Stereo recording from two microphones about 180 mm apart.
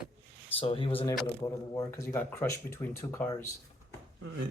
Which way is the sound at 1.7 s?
15° left (ahead or behind).